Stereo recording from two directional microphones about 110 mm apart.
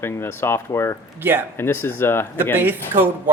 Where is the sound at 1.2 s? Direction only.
20° right (ahead or behind).